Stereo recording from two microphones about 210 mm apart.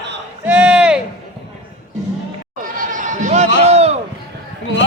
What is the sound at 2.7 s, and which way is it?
Bleat, 35° right (ahead or behind).